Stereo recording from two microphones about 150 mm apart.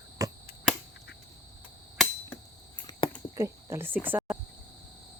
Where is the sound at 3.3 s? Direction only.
20° right (ahead or behind).